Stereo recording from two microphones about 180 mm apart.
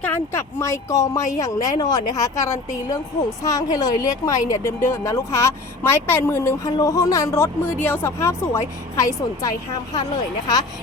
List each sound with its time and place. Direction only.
0.0 s speech: 15° left (ahead or behind)